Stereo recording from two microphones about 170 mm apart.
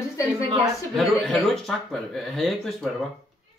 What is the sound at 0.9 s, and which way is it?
Speech, centre (ahead or behind).